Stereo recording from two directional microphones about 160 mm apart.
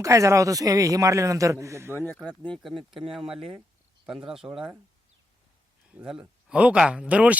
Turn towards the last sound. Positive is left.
turn(degrees=-10)  # may be behind; listen again after turning